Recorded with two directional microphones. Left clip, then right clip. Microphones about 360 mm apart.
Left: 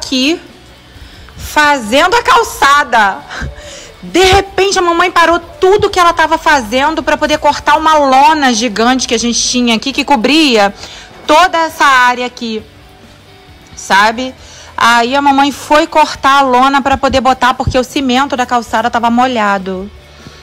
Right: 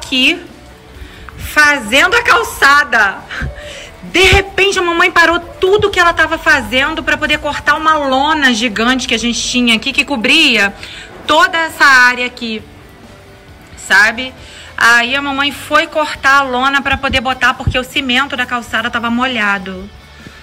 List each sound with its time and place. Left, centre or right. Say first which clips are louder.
0.0 s speech: right 1 dB; centre
1.4 s a woman's voice: even; centre
13.8 s a woman's voice: left 1 dB; centre